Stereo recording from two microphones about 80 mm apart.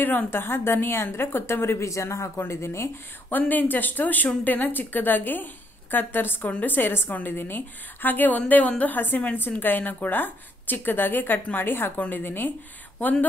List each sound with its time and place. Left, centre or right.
0.0 s a woman's voice: left
3.3 s a woman's voice: left